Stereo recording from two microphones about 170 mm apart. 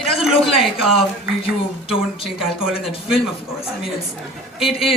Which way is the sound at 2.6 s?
5° right (ahead or behind).